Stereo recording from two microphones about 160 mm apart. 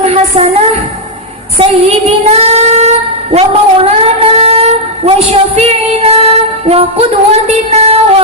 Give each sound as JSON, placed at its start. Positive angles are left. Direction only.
{"t": 0.0, "sound": "music", "side_deg": -40}
{"t": 2.0, "sound": "child singing", "side_deg": -40}